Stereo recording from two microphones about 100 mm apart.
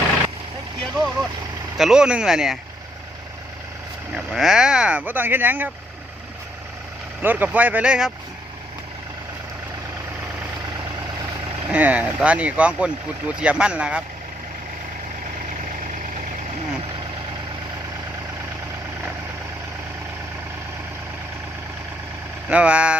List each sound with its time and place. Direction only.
0.9 s vehicle: 5° right (ahead or behind)
1.8 s speech: 10° right (ahead or behind)
4.1 s speech: 5° right (ahead or behind); by 5.7 s 20° right (ahead or behind)
7.2 s speech: 20° right (ahead or behind)
11.7 s speech: 15° right (ahead or behind)
22.4 s speech: 10° right (ahead or behind)